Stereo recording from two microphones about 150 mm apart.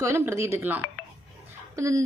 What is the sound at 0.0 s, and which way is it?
A woman's voice, 20° right (ahead or behind).